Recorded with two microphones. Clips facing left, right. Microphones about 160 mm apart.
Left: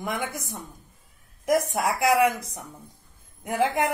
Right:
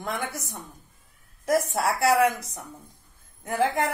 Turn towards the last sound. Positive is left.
turn(degrees=20)  # may be behind; listen again after turning